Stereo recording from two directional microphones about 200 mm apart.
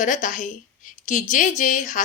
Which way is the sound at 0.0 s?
40° left (ahead or behind).